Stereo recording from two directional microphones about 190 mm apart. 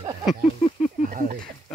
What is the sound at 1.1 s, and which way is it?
Speech, 45° right (ahead or behind).